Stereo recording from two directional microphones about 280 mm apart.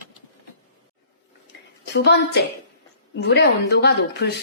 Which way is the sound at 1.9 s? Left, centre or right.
Left.